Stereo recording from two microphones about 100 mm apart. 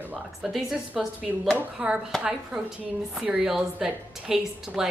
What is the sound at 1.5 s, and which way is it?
Speech, 15° right (ahead or behind).